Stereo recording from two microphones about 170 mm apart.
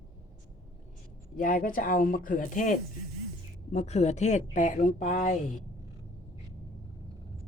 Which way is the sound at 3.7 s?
40° left (ahead or behind).